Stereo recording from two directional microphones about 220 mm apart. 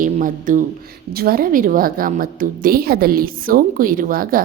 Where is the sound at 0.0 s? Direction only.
35° right (ahead or behind).